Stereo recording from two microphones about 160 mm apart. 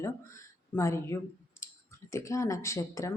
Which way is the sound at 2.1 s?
20° left (ahead or behind).